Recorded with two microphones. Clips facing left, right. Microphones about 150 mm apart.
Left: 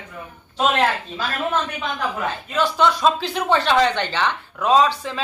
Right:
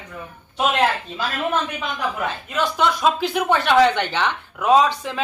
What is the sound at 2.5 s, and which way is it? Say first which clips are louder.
Speech: left 2 dB; 15° right (ahead or behind).